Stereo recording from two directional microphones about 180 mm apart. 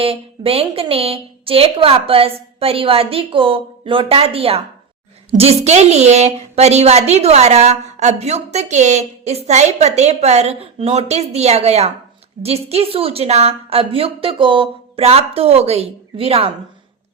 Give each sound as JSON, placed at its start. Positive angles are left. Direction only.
{"t": 0.0, "sound": "a woman's voice", "side_deg": -30}